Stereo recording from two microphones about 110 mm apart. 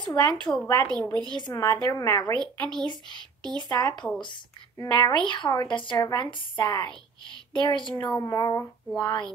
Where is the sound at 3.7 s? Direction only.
40° left (ahead or behind).